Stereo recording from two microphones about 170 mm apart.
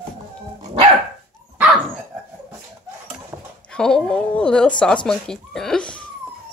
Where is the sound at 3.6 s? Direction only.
5° left (ahead or behind).